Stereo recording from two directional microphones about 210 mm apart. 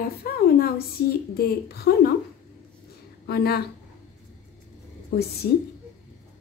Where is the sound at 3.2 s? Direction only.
50° left (ahead or behind).